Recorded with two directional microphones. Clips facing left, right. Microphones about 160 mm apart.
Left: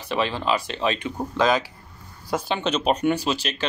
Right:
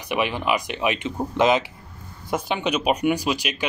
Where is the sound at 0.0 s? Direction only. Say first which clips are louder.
Right 1 dB; 15° right (ahead or behind).